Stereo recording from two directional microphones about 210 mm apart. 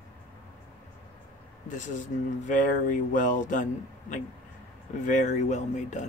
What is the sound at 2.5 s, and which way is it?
Speech, 40° left (ahead or behind).